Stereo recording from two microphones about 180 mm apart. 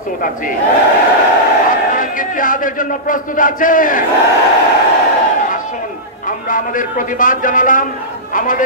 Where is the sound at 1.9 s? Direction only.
50° left (ahead or behind).